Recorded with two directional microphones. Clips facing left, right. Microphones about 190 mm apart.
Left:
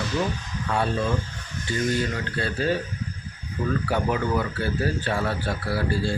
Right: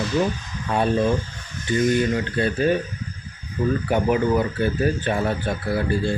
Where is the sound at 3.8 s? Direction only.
20° right (ahead or behind).